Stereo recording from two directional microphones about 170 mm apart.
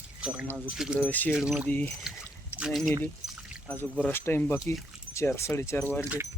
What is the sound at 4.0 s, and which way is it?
Speech, 15° left (ahead or behind).